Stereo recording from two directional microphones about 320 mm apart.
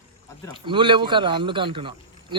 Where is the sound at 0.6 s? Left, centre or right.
Centre.